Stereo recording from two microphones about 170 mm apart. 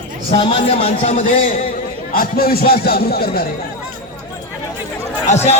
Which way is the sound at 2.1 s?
60° left (ahead or behind).